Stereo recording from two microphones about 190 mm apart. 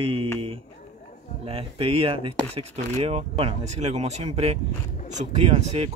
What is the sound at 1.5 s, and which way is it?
Speech, 30° right (ahead or behind).